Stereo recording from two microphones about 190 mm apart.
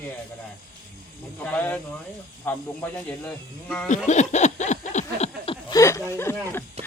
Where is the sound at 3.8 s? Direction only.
40° left (ahead or behind).